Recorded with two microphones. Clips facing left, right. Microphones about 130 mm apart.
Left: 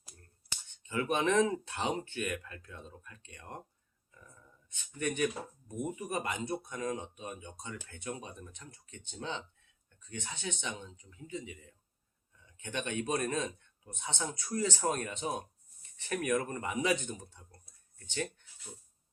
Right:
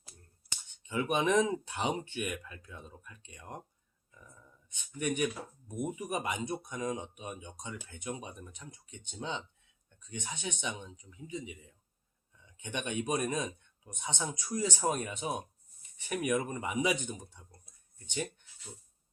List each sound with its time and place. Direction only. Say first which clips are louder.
0.8 s speech: right 1 dB; 15° right (ahead or behind)
4.7 s speech: right 1 dB; 15° right (ahead or behind)